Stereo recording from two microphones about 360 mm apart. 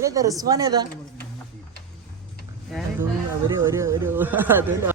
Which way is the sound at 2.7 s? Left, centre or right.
Centre.